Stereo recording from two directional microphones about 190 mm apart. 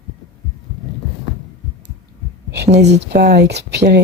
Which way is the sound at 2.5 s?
60° right (ahead or behind).